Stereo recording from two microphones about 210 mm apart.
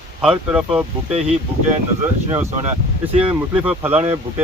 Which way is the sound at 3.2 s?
5° right (ahead or behind).